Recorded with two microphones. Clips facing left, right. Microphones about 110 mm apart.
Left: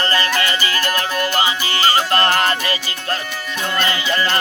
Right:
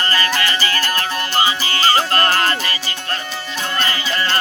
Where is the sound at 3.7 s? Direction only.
35° right (ahead or behind).